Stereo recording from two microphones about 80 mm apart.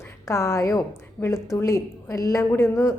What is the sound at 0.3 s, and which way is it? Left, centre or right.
A woman's voice, left.